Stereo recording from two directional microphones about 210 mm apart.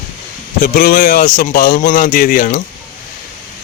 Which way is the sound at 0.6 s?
45° left (ahead or behind).